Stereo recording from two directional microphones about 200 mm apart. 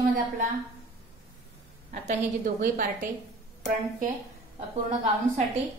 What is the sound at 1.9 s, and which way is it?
A woman's voice, 40° right (ahead or behind).